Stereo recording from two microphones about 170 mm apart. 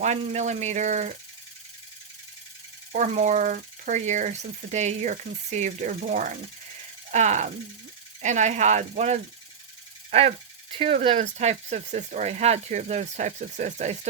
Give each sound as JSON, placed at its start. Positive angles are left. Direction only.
{"t": 0.0, "sound": "speech", "side_deg": -45}
{"t": 2.9, "sound": "speech", "side_deg": -45}